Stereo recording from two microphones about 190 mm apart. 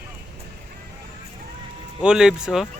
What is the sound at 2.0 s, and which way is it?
Speech, 5° right (ahead or behind).